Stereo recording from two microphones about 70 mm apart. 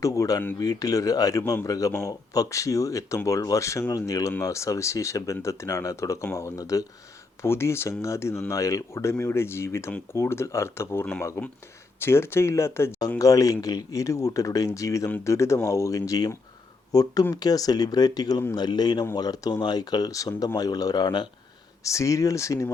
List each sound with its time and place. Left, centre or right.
0.0 s speech: left
3.8 s speech: left
7.4 s speech: left
13.1 s speech: left
18.5 s speech: left
19.1 s speech: left
20.6 s speech: left
21.8 s speech: left